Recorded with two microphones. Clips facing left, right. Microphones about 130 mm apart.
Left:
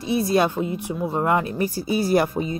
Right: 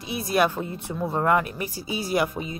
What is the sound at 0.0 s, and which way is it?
A woman's voice, 35° left (ahead or behind).